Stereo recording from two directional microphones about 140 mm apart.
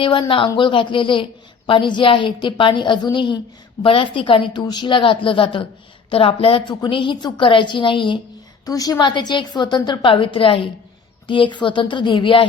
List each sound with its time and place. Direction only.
0.0 s a woman's voice: 35° left (ahead or behind)